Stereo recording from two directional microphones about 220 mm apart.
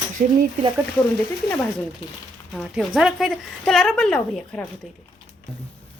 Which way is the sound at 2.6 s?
Centre (ahead or behind).